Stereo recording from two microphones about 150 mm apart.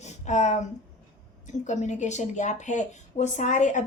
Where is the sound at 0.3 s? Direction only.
50° left (ahead or behind).